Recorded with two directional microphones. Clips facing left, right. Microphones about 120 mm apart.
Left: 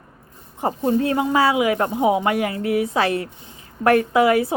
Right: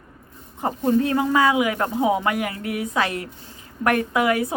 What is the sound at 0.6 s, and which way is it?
A woman's voice, 30° left (ahead or behind).